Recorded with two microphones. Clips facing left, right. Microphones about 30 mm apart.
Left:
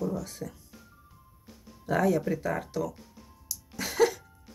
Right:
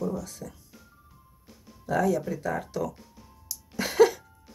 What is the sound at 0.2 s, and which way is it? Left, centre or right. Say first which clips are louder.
Speech: left 1 dB; left.